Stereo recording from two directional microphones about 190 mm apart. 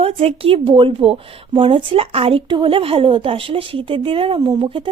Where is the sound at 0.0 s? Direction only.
30° right (ahead or behind).